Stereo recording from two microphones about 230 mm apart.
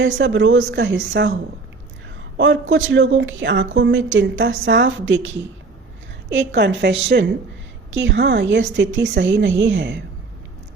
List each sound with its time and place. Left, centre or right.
0.2 s speech: right
2.4 s speech: right